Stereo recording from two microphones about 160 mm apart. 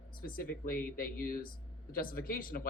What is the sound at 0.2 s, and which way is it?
Speech, 65° left (ahead or behind).